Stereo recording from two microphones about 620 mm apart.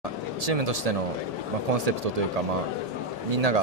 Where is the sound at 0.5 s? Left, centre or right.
Right.